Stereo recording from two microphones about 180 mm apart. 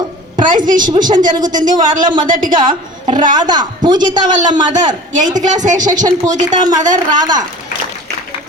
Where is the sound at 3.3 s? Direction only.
25° right (ahead or behind).